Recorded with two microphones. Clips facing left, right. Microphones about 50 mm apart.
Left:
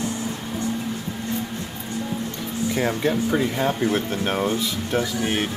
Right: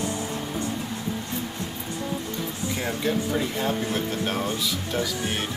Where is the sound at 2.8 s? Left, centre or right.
Left.